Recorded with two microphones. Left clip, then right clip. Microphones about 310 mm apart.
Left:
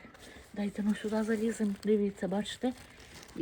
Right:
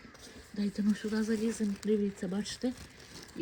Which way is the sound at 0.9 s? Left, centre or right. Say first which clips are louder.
Left 3 dB; centre.